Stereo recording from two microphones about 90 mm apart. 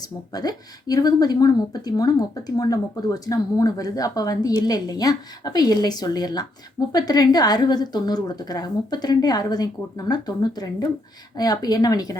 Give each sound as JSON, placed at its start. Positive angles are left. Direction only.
{"t": 0.3, "sound": "a woman's voice", "side_deg": 45}